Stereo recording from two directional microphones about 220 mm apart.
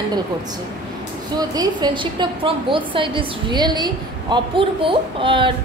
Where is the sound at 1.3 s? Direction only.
15° right (ahead or behind).